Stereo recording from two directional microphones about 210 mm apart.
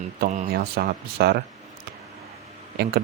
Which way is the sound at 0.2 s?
40° right (ahead or behind).